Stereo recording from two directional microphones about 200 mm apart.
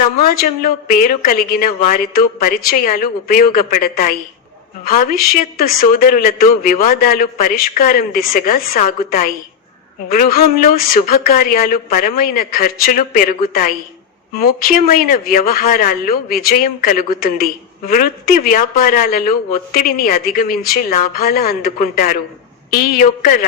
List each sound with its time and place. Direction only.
0.3 s a man's voice: 45° left (ahead or behind)
5.5 s a man's voice: 45° left (ahead or behind)